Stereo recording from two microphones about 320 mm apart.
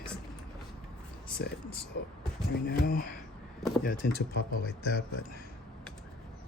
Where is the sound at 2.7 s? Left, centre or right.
Left.